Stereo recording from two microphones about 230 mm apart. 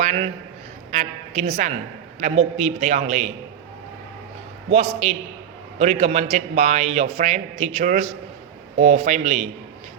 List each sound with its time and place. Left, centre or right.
0.0 s a man's voice: right
4.7 s a man's voice: right